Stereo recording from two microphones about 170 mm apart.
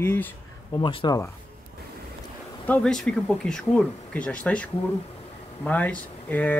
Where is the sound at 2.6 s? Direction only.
5° left (ahead or behind).